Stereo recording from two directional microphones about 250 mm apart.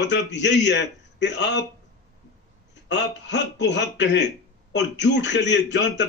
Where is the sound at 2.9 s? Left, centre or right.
Left.